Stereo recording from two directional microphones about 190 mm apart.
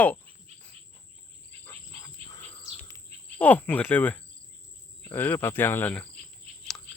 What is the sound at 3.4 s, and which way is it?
Speech, 10° left (ahead or behind).